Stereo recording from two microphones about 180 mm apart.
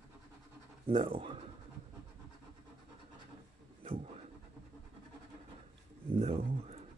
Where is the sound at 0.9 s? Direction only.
30° right (ahead or behind).